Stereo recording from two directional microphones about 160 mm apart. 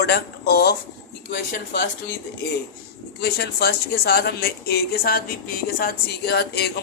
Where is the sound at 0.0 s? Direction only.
80° left.